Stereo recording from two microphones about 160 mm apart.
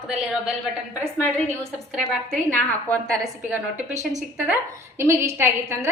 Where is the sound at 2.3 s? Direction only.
10° left (ahead or behind).